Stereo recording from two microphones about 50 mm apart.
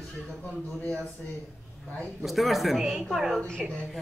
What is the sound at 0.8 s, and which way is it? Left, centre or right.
Speech, left.